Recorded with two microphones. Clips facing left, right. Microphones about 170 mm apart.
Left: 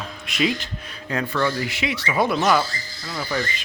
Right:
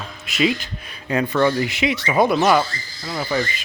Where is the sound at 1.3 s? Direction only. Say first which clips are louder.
Right 5 dB; 25° right (ahead or behind).